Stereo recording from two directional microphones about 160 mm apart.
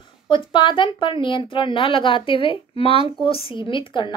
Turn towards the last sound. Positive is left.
turn(degrees=30)  # may be behind; listen again after turning